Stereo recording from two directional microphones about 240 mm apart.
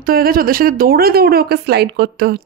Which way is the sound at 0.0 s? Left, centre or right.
Right.